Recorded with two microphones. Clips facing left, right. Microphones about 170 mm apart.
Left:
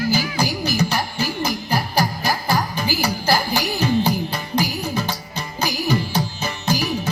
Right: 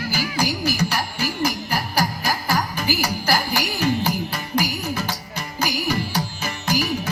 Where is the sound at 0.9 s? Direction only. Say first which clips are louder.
Left 2 dB; 10° right (ahead or behind).